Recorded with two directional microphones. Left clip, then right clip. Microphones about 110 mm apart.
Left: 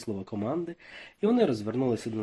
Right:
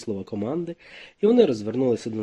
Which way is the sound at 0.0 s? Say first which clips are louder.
Right 4 dB; 35° right (ahead or behind).